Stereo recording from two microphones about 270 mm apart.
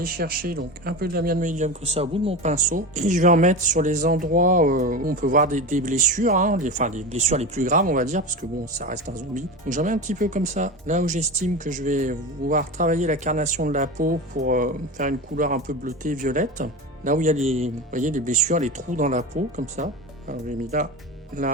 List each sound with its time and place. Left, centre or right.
0.0 s speech: right